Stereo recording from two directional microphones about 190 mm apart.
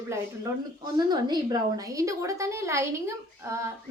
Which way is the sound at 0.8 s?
20° right (ahead or behind).